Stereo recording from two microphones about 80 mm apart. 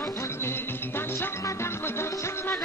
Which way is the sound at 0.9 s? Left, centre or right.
Left.